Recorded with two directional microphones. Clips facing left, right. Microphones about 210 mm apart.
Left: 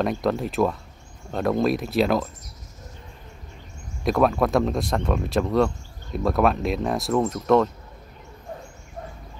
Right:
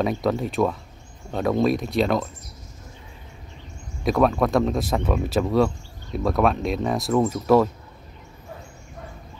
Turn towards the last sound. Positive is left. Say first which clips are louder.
# right 1 dB
turn(degrees=-5)  # may be behind; listen again after turning